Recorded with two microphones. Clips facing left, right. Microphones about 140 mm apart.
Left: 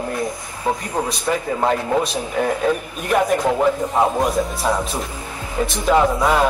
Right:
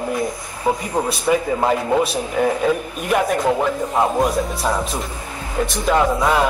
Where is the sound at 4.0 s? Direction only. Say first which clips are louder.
Even; centre (ahead or behind).